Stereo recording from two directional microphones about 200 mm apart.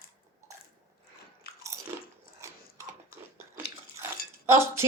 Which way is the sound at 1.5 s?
50° left (ahead or behind).